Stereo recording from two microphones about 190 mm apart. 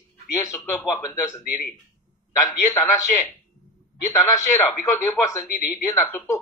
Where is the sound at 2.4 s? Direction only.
15° left (ahead or behind).